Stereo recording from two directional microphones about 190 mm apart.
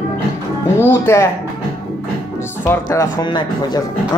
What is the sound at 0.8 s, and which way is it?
Speech, 15° left (ahead or behind).